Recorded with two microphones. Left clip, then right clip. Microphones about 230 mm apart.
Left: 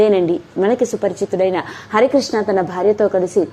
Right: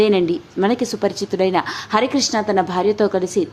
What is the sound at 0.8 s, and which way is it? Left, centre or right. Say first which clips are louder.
A woman's voice: left 3 dB; centre.